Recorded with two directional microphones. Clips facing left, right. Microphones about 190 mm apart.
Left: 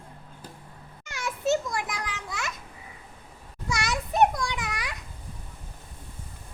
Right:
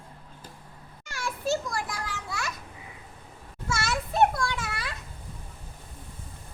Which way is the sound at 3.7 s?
15° left (ahead or behind).